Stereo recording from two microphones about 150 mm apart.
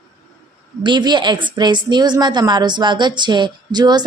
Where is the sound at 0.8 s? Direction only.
30° right (ahead or behind).